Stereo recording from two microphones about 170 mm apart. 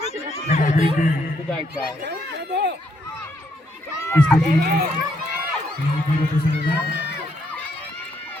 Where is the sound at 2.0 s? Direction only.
80° right.